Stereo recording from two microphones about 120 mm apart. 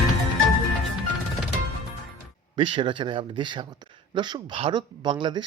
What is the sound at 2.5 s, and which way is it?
Speech, 45° right (ahead or behind).